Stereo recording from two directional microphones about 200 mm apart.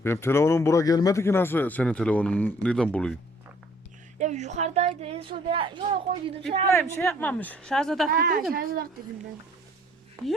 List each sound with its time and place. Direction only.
0.0 s speech: 10° left (ahead or behind)
4.2 s speech: 35° right (ahead or behind)
6.7 s speech: 10° left (ahead or behind)
8.1 s speech: 50° right (ahead or behind)
10.2 s speech: 15° right (ahead or behind)